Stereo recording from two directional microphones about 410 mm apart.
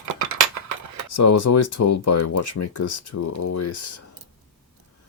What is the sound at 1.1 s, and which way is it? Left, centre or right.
Speech, left.